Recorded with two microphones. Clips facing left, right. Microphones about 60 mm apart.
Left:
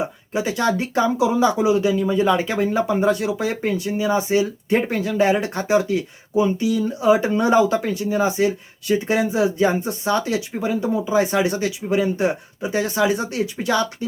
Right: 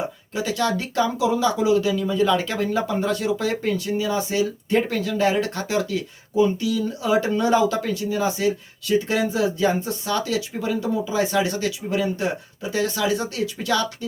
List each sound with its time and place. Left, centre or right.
0.3 s speech: left